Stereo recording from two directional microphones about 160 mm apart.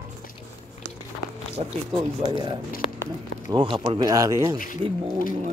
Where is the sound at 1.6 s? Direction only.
45° right (ahead or behind).